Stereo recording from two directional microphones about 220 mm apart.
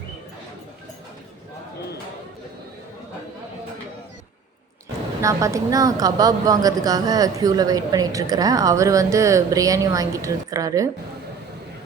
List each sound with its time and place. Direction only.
5.2 s a woman's voice: 15° right (ahead or behind)